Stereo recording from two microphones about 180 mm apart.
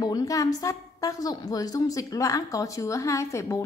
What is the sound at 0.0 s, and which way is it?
A woman's voice, 20° left (ahead or behind).